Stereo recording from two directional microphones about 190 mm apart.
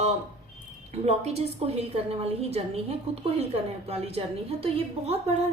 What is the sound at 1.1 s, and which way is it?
A woman's voice, 35° right (ahead or behind).